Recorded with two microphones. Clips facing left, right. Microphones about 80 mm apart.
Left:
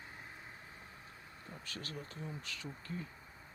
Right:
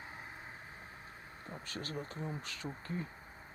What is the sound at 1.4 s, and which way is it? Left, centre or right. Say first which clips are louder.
Speech: right 4 dB; right.